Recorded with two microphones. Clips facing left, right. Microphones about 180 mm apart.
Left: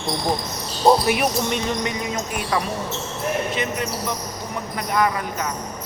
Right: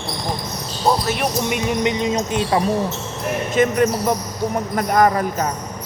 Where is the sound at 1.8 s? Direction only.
20° right (ahead or behind).